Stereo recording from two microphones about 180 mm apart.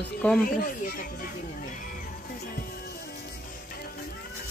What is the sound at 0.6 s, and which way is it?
Speech, 55° left (ahead or behind).